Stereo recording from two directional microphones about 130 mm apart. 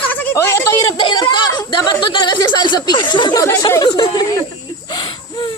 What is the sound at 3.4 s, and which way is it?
Speech, 25° left (ahead or behind).